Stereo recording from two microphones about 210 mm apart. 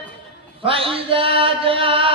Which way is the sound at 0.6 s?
25° right (ahead or behind).